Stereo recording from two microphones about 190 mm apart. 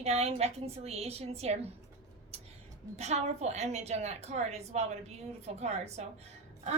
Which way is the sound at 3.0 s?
35° right (ahead or behind).